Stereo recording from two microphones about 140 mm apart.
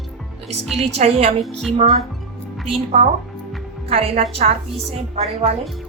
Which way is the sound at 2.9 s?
50° right (ahead or behind).